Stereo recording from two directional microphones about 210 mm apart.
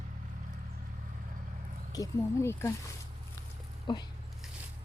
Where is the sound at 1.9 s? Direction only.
15° left (ahead or behind).